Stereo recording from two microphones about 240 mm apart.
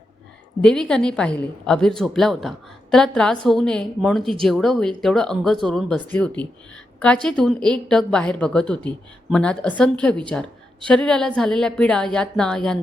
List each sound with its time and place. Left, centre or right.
0.6 s a woman's voice: centre